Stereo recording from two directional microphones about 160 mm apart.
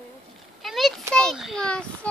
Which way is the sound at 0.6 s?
Centre (ahead or behind).